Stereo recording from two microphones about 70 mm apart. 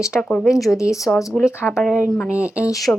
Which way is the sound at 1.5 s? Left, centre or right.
Left.